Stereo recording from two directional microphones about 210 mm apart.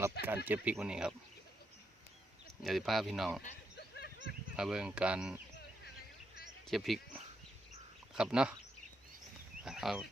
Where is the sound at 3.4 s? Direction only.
50° left (ahead or behind).